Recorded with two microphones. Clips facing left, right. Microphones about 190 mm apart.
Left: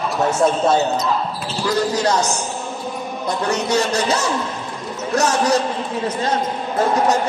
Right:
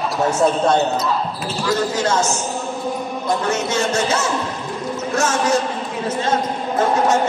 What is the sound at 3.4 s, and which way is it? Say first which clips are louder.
Speech: left 1 dB; 35° left (ahead or behind).